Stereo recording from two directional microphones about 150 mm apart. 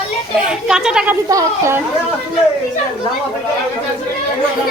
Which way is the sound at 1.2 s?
20° right (ahead or behind).